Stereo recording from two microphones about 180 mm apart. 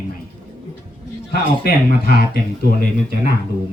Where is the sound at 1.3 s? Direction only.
60° left (ahead or behind).